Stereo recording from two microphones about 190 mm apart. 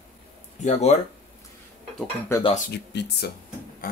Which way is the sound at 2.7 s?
60° left (ahead or behind).